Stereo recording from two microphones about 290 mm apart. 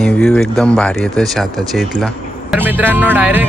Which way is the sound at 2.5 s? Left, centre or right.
Centre.